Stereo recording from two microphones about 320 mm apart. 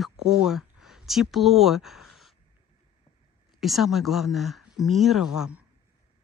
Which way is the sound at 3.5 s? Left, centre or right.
Centre.